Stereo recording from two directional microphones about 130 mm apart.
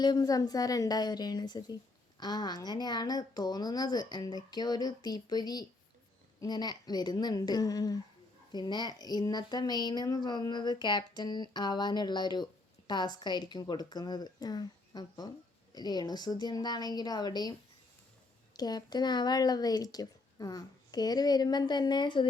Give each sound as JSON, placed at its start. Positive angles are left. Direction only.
{"t": 0.0, "sound": "a woman's voice", "side_deg": 30}
{"t": 18.5, "sound": "a woman's voice", "side_deg": 30}